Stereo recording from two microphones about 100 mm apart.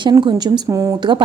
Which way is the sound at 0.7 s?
30° right (ahead or behind).